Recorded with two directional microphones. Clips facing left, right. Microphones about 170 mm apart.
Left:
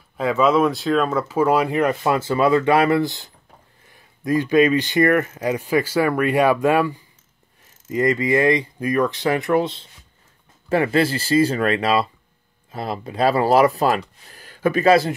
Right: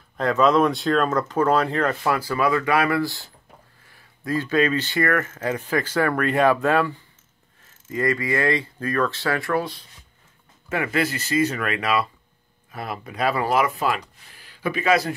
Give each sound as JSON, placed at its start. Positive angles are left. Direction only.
{"t": 0.2, "sound": "speech", "side_deg": 5}